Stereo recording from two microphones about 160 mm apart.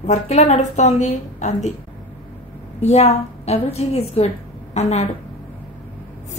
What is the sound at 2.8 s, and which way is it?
A woman's voice, 40° left (ahead or behind).